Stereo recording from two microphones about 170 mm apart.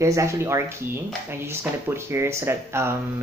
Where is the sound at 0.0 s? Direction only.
15° right (ahead or behind).